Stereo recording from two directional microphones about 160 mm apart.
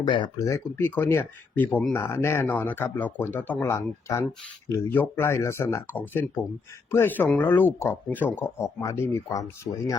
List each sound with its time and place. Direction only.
0.0 s speech: 30° left (ahead or behind)
0.4 s speech: 15° left (ahead or behind)